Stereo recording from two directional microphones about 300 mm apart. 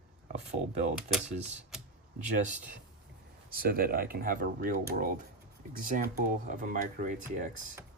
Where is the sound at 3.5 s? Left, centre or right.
Right.